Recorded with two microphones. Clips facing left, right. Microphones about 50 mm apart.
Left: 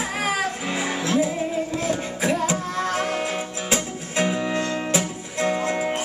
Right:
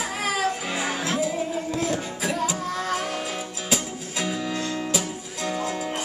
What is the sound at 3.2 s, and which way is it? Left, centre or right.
Music, left.